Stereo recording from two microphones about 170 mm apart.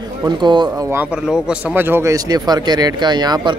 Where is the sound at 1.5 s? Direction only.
10° right (ahead or behind).